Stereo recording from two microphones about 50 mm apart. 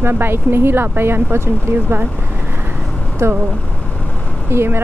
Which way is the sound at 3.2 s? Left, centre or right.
Right.